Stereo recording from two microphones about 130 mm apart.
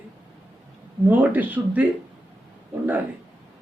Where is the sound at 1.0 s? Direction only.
15° right (ahead or behind).